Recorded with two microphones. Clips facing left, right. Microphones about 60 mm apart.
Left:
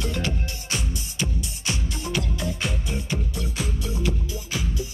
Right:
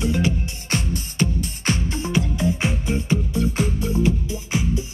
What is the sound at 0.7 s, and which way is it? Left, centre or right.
Music, right.